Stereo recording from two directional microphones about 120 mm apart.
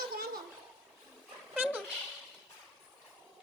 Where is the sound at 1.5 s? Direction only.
15° right (ahead or behind).